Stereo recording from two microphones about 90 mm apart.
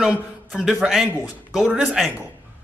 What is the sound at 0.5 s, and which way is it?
A man's voice, centre (ahead or behind).